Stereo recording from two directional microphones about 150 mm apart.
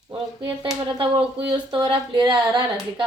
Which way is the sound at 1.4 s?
30° right (ahead or behind).